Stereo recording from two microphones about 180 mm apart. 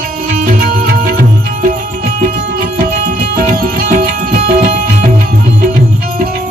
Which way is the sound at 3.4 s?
55° right (ahead or behind).